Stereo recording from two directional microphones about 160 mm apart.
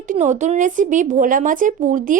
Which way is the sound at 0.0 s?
50° right (ahead or behind).